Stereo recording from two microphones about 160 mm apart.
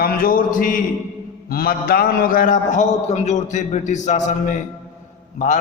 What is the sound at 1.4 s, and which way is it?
A man's voice, 70° left (ahead or behind).